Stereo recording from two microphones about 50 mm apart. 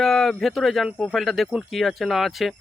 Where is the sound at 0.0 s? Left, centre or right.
Centre.